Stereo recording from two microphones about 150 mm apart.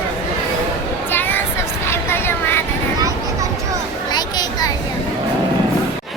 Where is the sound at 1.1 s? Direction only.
15° left (ahead or behind).